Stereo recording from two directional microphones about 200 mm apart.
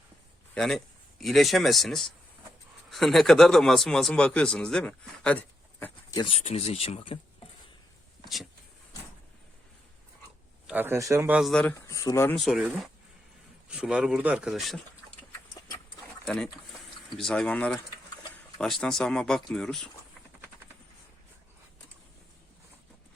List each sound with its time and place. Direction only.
0.5 s a man's voice: centre (ahead or behind)
6.1 s speech: 25° left (ahead or behind)
10.7 s speech: 10° right (ahead or behind); by 12.4 s 15° left (ahead or behind)
12.4 s speech: 5° right (ahead or behind)
16.2 s speech: 5° left (ahead or behind)